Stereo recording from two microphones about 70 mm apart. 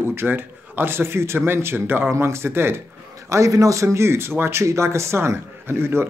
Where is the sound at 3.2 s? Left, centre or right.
Right.